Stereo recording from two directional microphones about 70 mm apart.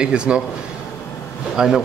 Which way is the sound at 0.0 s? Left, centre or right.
Centre.